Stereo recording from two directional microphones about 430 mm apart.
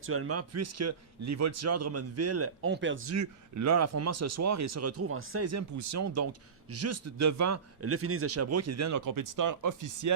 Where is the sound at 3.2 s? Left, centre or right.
Right.